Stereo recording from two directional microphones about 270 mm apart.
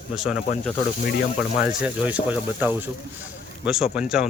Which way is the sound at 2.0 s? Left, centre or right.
Centre.